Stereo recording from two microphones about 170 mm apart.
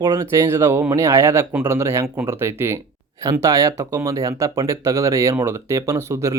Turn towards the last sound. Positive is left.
turn(degrees=-15)  # may be behind; listen again after turning